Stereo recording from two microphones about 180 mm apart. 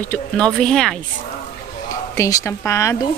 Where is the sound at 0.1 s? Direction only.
5° left (ahead or behind).